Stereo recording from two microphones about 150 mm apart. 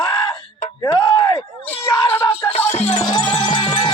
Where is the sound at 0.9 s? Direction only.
25° left (ahead or behind).